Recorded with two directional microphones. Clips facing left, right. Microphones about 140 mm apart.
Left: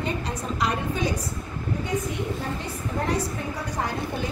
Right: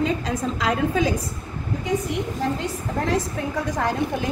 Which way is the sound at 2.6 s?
90° right.